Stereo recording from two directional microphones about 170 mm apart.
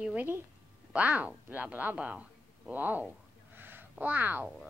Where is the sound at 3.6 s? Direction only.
10° right (ahead or behind).